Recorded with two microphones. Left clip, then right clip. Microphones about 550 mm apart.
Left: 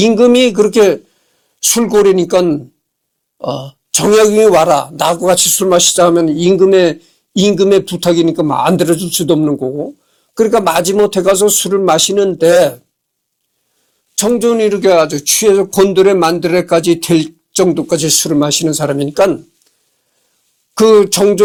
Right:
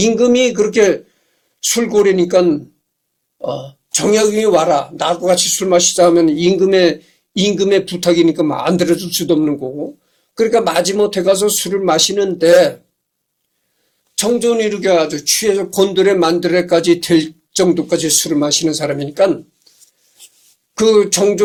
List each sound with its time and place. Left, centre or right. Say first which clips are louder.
0.0 s speech: left 4 dB; left
14.2 s speech: left 3 dB; left
20.7 s speech: left 4 dB; left